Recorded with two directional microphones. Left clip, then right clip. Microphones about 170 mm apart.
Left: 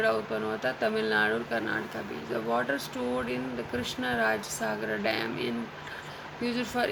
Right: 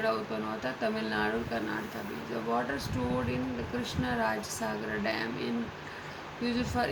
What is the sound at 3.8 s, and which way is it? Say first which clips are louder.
Speech: left 3 dB; 40° left (ahead or behind).